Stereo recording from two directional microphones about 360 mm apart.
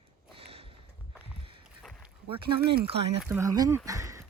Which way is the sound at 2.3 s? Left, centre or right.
Centre.